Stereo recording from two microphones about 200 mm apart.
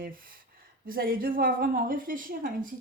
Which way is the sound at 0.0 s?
45° right (ahead or behind).